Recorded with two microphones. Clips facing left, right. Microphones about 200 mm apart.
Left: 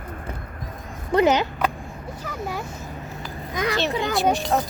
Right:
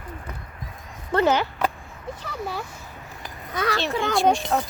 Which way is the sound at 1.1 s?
15° left (ahead or behind).